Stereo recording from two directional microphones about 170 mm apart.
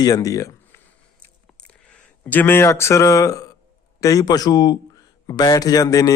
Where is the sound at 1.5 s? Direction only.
5° left (ahead or behind); by 3.6 s 20° left (ahead or behind).